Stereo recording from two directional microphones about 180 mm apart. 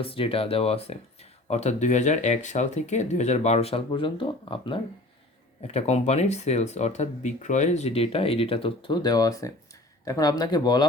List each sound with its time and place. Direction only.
0.0 s speech: 30° left (ahead or behind)